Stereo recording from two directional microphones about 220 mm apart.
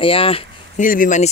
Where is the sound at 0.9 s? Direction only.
35° left (ahead or behind).